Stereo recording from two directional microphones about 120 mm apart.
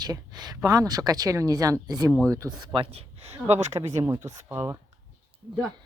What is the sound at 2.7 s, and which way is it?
Speech, 55° right (ahead or behind).